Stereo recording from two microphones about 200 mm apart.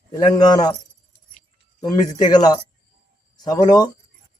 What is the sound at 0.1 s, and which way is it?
Speech, 20° left (ahead or behind).